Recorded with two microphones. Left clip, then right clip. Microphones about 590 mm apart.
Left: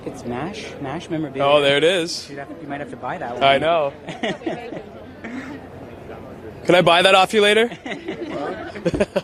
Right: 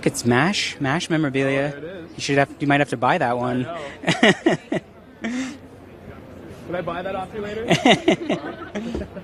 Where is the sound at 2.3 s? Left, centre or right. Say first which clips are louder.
Right 12 dB; right.